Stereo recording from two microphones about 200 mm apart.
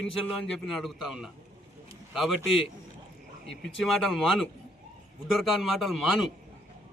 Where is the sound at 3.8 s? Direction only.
Centre (ahead or behind).